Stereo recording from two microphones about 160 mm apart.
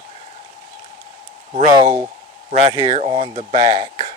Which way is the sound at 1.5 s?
40° right (ahead or behind).